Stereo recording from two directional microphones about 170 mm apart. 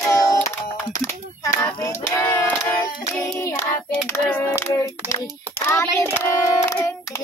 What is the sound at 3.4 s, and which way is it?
Child singing, 15° left (ahead or behind).